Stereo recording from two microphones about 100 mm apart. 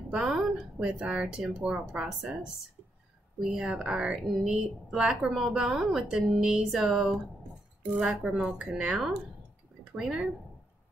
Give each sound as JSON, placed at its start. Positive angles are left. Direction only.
{"t": 0.1, "sound": "a woman's voice", "side_deg": -5}